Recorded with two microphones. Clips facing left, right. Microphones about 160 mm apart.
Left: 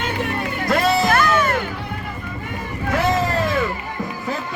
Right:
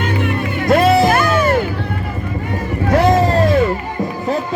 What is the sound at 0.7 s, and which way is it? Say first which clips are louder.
Music: right 7 dB; 30° right (ahead or behind).